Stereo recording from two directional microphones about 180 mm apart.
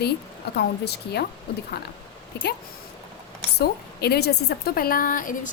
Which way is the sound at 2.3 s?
65° left (ahead or behind).